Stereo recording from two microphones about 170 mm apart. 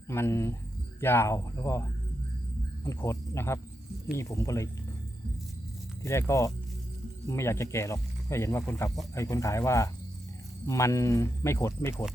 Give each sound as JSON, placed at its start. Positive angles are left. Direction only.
{"t": 0.1, "sound": "speech", "side_deg": 15}
{"t": 2.8, "sound": "speech", "side_deg": 15}
{"t": 6.0, "sound": "speech", "side_deg": 15}